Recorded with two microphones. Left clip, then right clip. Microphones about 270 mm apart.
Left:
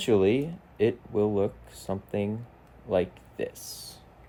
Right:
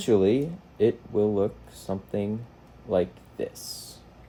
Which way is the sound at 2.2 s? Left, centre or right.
Centre.